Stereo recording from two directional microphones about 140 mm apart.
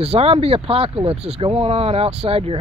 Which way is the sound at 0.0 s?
45° right (ahead or behind).